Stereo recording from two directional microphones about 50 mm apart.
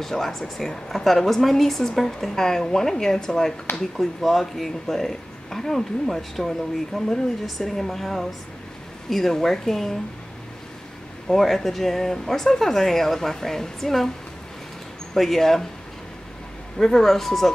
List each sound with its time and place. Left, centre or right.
0.0 s a woman's voice: centre
3.9 s a woman's voice: centre
11.2 s a woman's voice: centre
15.1 s a woman's voice: centre
16.7 s speech: centre